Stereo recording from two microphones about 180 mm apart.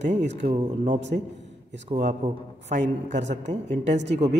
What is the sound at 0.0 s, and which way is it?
A man's voice, 40° right (ahead or behind).